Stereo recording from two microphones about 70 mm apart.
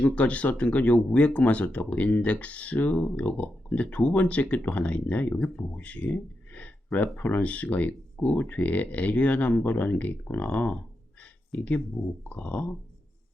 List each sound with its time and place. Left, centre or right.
0.0 s speech: centre
11.2 s a sound: left
12.3 s speech: centre